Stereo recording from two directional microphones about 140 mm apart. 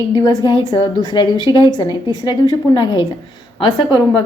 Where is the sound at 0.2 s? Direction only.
25° left (ahead or behind).